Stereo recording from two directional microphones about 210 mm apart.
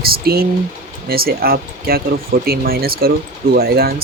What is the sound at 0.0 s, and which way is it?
Speech, 45° right (ahead or behind).